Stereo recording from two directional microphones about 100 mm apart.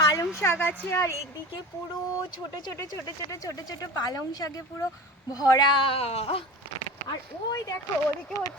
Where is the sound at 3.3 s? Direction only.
35° left (ahead or behind); by 6.4 s 75° left (ahead or behind).